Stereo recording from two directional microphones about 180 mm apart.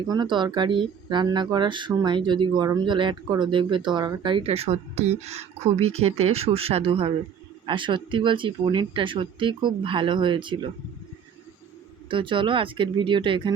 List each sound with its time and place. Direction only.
0.1 s speech: 25° right (ahead or behind)
12.0 s speech: 30° right (ahead or behind)